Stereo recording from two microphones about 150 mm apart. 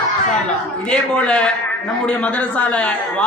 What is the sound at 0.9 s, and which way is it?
A man's voice, 5° left (ahead or behind).